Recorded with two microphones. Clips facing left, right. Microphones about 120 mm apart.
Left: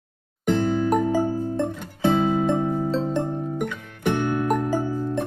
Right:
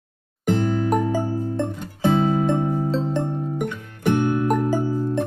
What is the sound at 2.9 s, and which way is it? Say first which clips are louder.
Music: even; centre (ahead or behind).